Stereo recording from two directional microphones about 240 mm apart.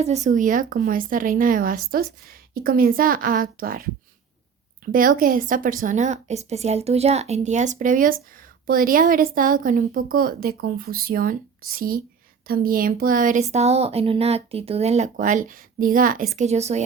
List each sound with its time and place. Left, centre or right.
0.0 s speech: right
4.9 s speech: right